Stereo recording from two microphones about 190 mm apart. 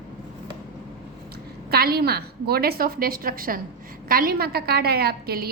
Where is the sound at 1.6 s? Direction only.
55° right (ahead or behind).